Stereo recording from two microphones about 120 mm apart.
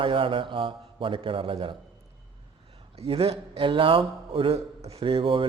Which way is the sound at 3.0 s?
50° right (ahead or behind).